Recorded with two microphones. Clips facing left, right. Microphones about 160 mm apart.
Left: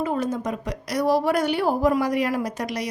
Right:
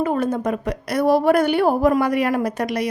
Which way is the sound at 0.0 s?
55° right (ahead or behind).